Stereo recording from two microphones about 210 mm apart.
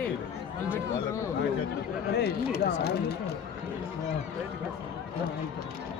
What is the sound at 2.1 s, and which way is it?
Speech, 50° left (ahead or behind).